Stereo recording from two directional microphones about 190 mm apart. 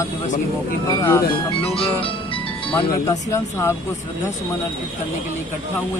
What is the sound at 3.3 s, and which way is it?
Speech, 15° left (ahead or behind).